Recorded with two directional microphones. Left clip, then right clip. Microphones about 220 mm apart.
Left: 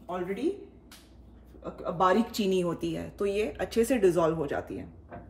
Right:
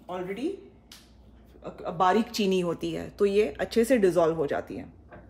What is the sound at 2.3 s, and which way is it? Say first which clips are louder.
Speech: right 2 dB; 30° right (ahead or behind).